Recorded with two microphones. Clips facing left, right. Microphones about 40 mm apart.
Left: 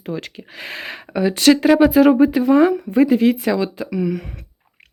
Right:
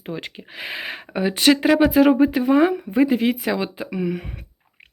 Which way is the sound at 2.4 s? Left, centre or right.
Right.